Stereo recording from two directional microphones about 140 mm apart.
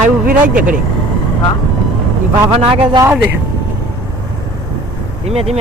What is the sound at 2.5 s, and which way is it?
Speech, 40° right (ahead or behind).